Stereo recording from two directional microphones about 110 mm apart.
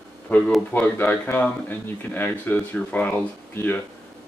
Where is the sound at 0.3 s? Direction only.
15° left (ahead or behind).